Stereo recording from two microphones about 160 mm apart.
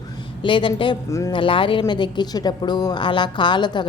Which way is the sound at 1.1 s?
20° left (ahead or behind).